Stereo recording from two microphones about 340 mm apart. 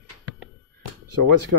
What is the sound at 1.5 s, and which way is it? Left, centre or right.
Speech, right.